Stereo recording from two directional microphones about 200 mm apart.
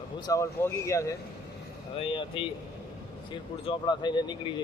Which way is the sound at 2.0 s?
25° left (ahead or behind).